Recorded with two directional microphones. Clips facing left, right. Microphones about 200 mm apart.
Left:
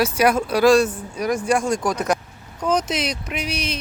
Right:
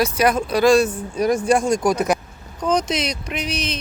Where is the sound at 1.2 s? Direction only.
25° right (ahead or behind).